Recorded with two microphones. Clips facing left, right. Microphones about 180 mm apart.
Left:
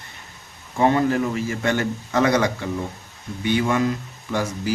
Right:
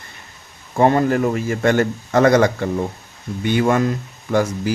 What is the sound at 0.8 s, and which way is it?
A man's voice, 50° right (ahead or behind).